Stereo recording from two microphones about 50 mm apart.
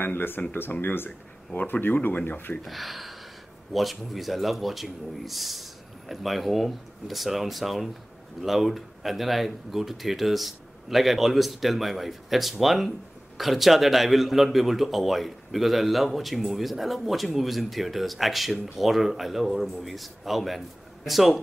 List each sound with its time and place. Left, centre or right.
0.0 s speech: left
2.6 s a man's voice: centre